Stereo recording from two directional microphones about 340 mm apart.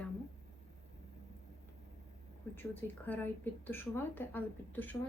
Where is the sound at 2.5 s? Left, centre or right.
Centre.